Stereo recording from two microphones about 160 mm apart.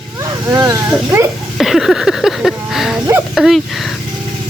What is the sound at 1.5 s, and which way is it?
Speech, centre (ahead or behind).